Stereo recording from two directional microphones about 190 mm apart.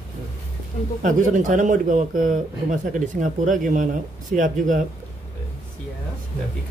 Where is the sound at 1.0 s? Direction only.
40° right (ahead or behind).